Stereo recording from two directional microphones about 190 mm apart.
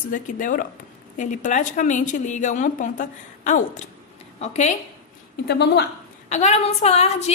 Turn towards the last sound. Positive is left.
turn(degrees=35)  # may be behind; listen again after turning